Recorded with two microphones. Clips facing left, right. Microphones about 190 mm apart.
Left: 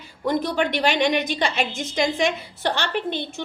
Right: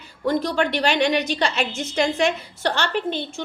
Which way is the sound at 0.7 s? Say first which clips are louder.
Even; 15° left (ahead or behind).